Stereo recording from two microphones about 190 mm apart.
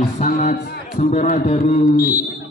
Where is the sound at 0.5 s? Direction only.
55° left (ahead or behind).